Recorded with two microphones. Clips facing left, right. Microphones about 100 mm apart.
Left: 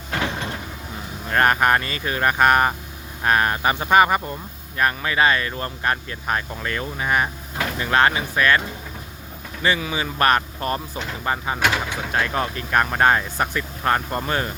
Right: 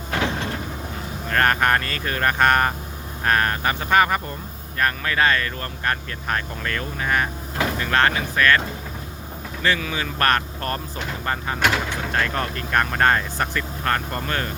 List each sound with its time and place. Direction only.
1.3 s speech: 15° left (ahead or behind)
9.6 s speech: 15° left (ahead or behind)